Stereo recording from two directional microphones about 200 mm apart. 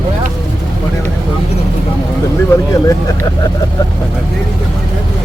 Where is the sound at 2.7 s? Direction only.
15° left (ahead or behind).